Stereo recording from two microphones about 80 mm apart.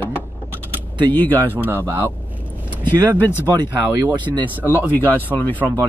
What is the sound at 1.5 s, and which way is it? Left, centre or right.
Speech, right.